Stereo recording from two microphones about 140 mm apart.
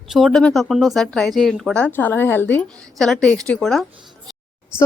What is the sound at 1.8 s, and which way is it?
A woman's voice, 10° left (ahead or behind).